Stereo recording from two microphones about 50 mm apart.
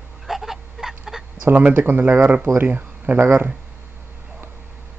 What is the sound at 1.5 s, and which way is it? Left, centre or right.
Speech, right.